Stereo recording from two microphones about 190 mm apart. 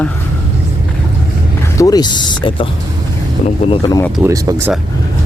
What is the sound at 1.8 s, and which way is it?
Speech, 20° left (ahead or behind).